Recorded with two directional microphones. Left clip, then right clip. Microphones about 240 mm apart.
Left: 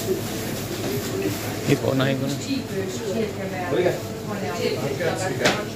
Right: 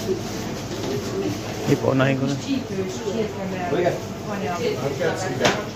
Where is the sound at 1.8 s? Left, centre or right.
Centre.